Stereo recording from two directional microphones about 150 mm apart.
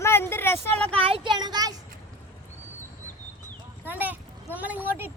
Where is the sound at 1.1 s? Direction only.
30° right (ahead or behind).